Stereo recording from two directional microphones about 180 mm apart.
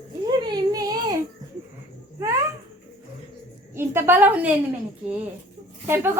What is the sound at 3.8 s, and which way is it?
Speech, 10° right (ahead or behind).